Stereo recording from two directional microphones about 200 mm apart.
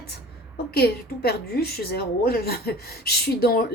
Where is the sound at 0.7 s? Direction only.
50° left (ahead or behind).